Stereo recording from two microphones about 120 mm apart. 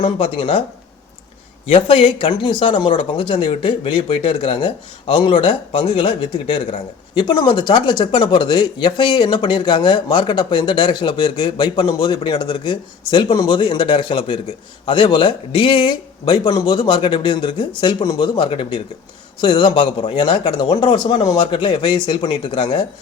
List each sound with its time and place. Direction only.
0.0 s speech: 45° left (ahead or behind)
1.6 s a man's voice: 50° left (ahead or behind)